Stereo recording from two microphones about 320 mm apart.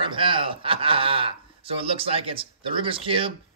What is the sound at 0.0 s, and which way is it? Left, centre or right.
A man's voice, centre.